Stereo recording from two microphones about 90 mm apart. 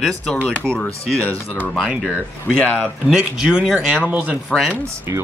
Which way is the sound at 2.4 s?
15° left (ahead or behind).